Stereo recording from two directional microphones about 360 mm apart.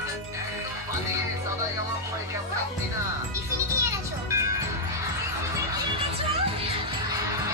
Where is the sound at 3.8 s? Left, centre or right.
Centre.